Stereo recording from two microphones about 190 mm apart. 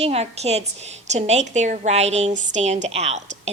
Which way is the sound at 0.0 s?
35° right (ahead or behind).